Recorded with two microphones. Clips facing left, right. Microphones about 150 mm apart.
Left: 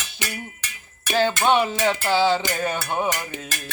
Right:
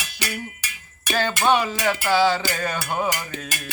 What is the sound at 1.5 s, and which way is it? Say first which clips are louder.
Music: right 3 dB; 20° left (ahead or behind).